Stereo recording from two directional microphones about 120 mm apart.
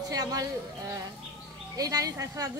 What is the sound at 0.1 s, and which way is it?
A woman's voice, 30° right (ahead or behind).